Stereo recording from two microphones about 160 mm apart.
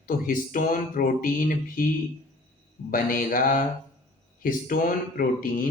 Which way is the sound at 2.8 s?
60° left (ahead or behind).